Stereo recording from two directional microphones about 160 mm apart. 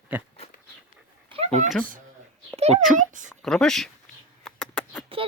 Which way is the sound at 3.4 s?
5° left (ahead or behind).